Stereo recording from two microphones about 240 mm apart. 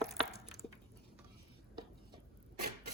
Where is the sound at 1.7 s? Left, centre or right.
Centre.